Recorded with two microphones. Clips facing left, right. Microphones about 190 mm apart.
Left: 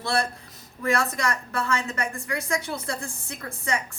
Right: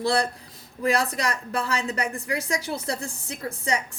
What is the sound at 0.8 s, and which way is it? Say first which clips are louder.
A woman's voice: right 1 dB; 35° right (ahead or behind).